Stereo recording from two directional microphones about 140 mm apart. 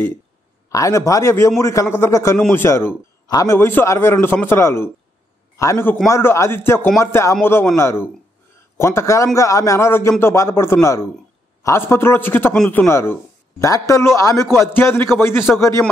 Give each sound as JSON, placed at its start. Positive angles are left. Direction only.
{"t": 0.7, "sound": "a man's voice", "side_deg": 25}